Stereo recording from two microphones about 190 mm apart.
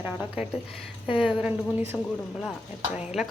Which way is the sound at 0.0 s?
5° right (ahead or behind).